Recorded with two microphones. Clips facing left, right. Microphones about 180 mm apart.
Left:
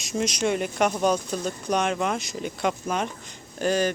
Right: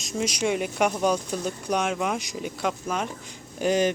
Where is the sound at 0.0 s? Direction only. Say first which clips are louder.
Left 1 dB; 5° right (ahead or behind).